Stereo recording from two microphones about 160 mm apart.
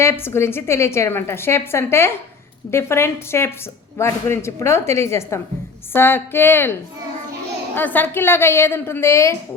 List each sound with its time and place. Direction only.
0.0 s a woman's voice: 15° left (ahead or behind)
7.8 s a woman's voice: 10° left (ahead or behind)